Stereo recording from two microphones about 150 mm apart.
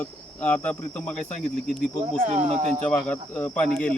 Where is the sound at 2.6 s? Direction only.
45° right (ahead or behind).